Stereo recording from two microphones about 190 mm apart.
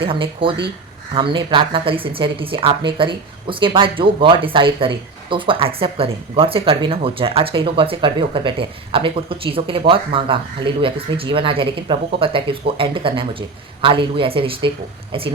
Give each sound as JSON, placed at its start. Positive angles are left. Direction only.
{"t": 0.0, "sound": "a woman's voice", "side_deg": -30}